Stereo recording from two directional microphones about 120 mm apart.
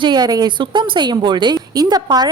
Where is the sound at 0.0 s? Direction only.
35° right (ahead or behind).